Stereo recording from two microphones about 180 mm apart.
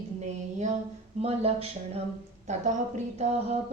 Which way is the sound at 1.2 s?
35° right (ahead or behind).